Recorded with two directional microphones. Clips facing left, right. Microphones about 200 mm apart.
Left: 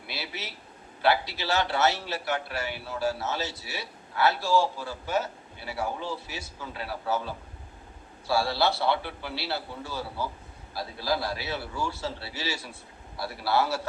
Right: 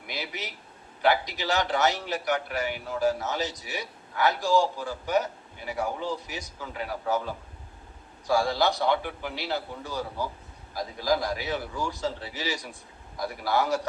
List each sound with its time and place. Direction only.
0.1 s a man's voice: 15° right (ahead or behind)